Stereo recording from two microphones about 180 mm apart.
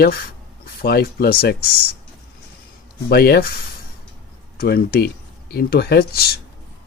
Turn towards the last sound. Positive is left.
turn(degrees=60)  # may be behind; listen again after turning